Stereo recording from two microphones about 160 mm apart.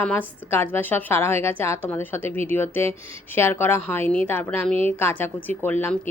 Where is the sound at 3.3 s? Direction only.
15° left (ahead or behind).